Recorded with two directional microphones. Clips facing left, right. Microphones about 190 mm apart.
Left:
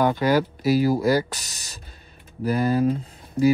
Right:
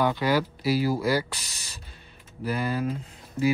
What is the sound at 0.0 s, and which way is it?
Speech, 45° left (ahead or behind).